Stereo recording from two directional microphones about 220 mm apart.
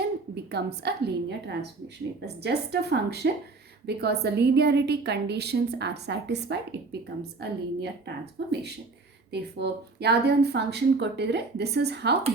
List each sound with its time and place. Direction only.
0.5 s a woman's voice: 50° right (ahead or behind)